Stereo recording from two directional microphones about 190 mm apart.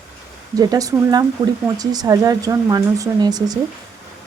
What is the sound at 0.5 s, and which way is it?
Speech, 20° right (ahead or behind).